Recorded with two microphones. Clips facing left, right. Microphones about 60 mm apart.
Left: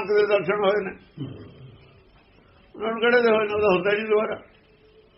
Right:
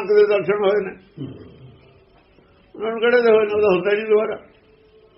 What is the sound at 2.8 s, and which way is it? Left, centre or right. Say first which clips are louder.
A man's voice: right 3 dB; centre.